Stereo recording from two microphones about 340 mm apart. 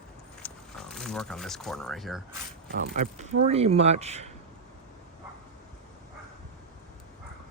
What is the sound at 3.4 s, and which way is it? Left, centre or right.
Speech, centre.